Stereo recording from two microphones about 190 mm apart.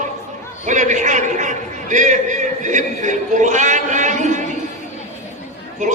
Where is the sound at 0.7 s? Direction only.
40° right (ahead or behind).